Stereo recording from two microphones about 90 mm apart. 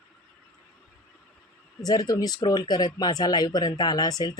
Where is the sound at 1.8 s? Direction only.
45° left (ahead or behind).